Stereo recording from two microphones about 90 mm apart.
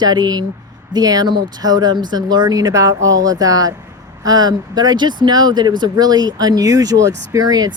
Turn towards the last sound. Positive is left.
turn(degrees=-45)  # may be behind; listen again after turning